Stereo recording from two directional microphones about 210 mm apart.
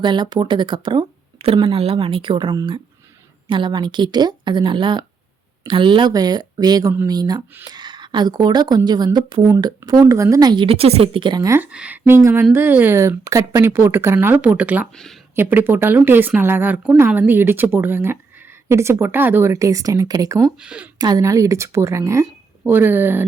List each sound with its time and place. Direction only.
0.0 s speech: 20° right (ahead or behind); by 15.2 s centre (ahead or behind)
15.4 s speech: 10° right (ahead or behind)
20.6 s speech: 5° right (ahead or behind)
21.0 s speech: 15° right (ahead or behind)